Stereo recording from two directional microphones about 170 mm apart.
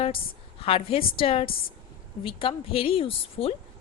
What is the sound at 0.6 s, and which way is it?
A woman's voice, 35° left (ahead or behind).